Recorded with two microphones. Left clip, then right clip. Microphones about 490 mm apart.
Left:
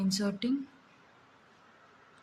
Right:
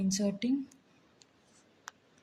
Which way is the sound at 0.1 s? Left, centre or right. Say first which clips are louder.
Right 1 dB; right.